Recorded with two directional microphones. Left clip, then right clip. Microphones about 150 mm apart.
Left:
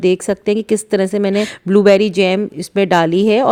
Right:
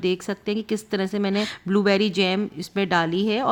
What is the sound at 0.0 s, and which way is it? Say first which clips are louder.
A woman's voice: left 10 dB; 35° left (ahead or behind).